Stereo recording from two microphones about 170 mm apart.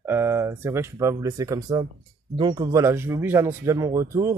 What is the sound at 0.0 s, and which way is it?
Speech, 15° right (ahead or behind).